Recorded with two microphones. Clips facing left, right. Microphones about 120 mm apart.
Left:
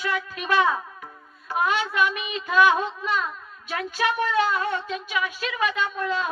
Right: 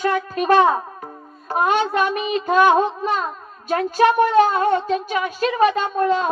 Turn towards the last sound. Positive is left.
turn(degrees=-45)  # may be behind; listen again after turning